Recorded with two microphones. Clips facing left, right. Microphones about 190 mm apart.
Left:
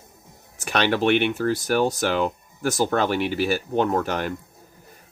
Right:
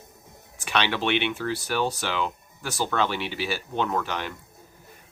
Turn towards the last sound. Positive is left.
turn(degrees=45)  # may be behind; listen again after turning